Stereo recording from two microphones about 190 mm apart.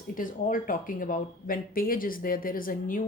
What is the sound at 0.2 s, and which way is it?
Speech, 45° left (ahead or behind).